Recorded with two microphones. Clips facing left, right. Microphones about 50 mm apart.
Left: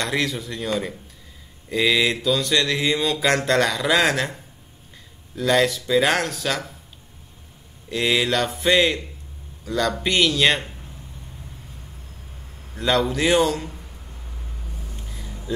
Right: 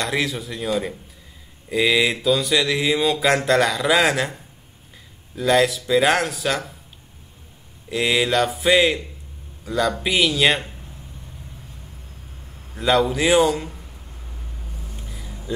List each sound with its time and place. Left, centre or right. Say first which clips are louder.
0.0 s mantra: right 1 dB; centre
7.9 s mantra: right 1 dB; centre
9.7 s a man's voice: right 1 dB; centre
12.7 s a man's voice: right 2 dB; centre
14.9 s vehicle: right 1 dB; centre